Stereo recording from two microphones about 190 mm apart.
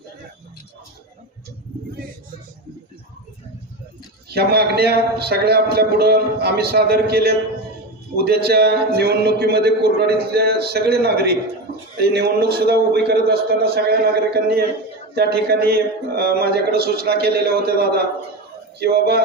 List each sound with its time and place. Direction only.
4.3 s a man's voice: 55° right (ahead or behind)